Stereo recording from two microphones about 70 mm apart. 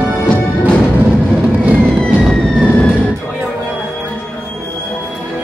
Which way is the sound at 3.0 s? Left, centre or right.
Centre.